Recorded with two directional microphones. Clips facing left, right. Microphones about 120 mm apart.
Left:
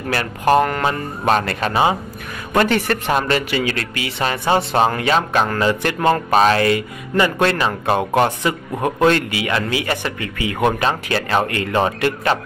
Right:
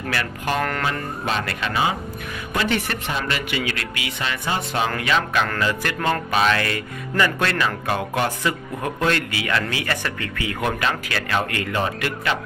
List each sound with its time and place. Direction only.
0.1 s speech: 35° left (ahead or behind)
0.8 s speech: 45° left (ahead or behind)
2.5 s speech: 50° left (ahead or behind); by 5.9 s 30° left (ahead or behind)
6.3 s speech: 40° left (ahead or behind)
6.6 s speech: 20° left (ahead or behind)